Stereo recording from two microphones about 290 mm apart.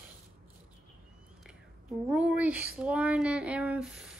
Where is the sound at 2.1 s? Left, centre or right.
Centre.